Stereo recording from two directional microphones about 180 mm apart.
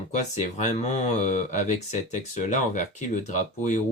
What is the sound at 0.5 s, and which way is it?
Speech, 40° left (ahead or behind).